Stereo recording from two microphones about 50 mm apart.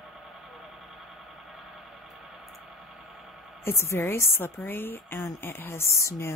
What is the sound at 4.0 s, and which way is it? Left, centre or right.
A woman's voice, left.